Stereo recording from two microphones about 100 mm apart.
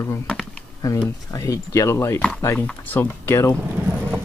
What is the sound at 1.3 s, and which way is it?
Speech, 35° left (ahead or behind).